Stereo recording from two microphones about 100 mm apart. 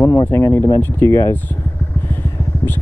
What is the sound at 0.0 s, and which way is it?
Speech, 25° left (ahead or behind).